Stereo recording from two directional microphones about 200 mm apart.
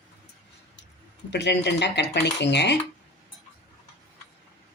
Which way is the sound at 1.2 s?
60° left (ahead or behind).